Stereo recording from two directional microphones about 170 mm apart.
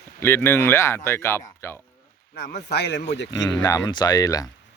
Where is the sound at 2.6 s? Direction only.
80° left.